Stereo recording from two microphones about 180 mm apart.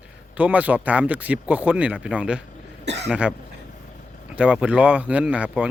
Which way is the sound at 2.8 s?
75° right (ahead or behind).